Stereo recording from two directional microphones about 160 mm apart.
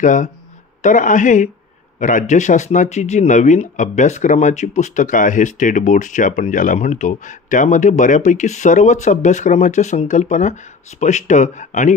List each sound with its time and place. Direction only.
0.0 s speech: 50° left (ahead or behind)